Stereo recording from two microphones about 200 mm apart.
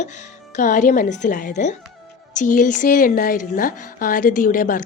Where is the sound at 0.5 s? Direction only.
40° left (ahead or behind).